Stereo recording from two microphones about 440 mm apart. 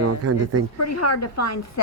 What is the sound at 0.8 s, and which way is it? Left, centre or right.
A woman's voice, left.